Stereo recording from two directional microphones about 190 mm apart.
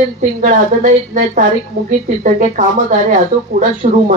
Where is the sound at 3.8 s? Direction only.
35° right (ahead or behind).